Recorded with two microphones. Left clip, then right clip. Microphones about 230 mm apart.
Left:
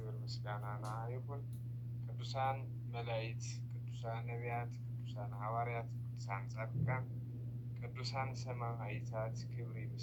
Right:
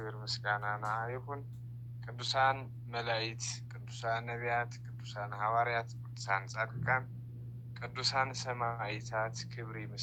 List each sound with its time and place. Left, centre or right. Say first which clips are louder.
0.0 s speech: right 12 dB; right